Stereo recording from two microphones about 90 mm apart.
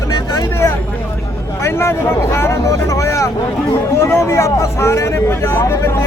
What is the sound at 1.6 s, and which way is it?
Speech, 30° left (ahead or behind).